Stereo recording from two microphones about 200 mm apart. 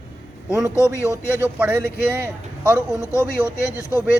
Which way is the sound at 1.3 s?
10° right (ahead or behind).